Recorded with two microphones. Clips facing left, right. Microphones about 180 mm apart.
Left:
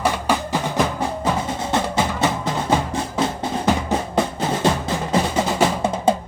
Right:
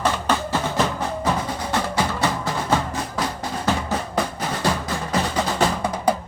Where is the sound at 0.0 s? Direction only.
10° left (ahead or behind).